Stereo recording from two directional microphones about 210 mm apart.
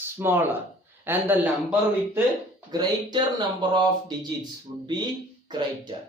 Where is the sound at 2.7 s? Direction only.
20° right (ahead or behind).